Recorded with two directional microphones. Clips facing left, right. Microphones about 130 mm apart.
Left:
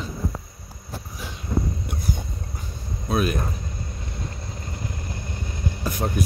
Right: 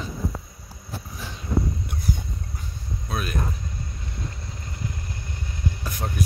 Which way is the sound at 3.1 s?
15° left (ahead or behind).